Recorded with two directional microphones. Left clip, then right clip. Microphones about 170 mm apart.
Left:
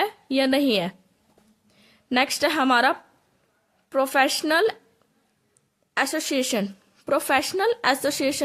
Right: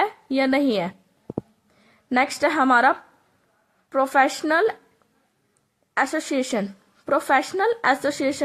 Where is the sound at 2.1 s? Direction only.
45° left (ahead or behind).